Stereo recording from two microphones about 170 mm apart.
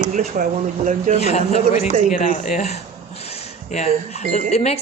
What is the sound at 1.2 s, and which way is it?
A man's voice, 40° left (ahead or behind).